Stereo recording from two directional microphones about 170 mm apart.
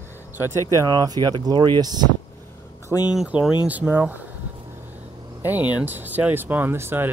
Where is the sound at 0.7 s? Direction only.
20° right (ahead or behind).